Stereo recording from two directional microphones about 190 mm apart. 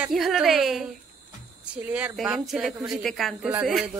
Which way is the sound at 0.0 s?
Centre (ahead or behind).